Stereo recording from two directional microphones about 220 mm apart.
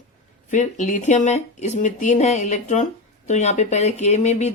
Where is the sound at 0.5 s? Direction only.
30° left (ahead or behind).